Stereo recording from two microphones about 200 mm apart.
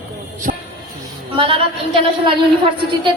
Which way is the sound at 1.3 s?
25° right (ahead or behind).